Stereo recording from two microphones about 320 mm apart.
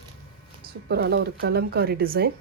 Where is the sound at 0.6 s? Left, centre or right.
Right.